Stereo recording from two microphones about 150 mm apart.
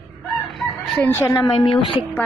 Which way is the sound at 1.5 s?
35° left (ahead or behind).